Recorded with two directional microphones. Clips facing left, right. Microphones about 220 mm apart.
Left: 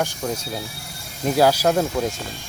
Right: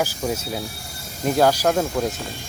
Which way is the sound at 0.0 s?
5° right (ahead or behind).